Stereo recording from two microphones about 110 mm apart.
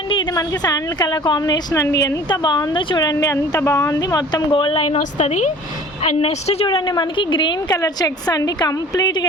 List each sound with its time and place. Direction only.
0.3 s speech: 35° left (ahead or behind)
1.7 s a woman's voice: 25° left (ahead or behind)
2.3 s speech: 40° left (ahead or behind)
4.5 s a woman's voice: 55° left (ahead or behind); by 5.5 s 90° left
6.0 s a woman's voice: 65° left (ahead or behind)
6.7 s a woman's voice: 45° left (ahead or behind)
7.8 s speech: 35° left (ahead or behind)